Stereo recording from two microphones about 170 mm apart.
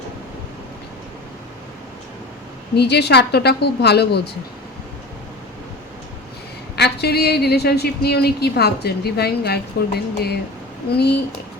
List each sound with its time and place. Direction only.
2.7 s a woman's voice: 80° left
6.7 s a woman's voice: 75° left (ahead or behind)